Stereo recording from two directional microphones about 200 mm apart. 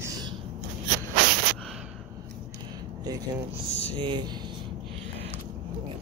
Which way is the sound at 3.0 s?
20° right (ahead or behind).